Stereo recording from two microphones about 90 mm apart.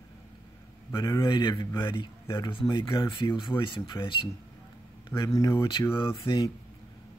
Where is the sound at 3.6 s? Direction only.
65° left (ahead or behind).